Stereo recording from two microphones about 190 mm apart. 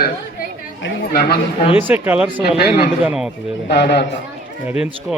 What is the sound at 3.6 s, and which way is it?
Speech, 65° left (ahead or behind).